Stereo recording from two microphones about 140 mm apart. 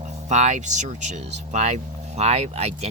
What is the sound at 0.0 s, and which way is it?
Speech, 55° right (ahead or behind).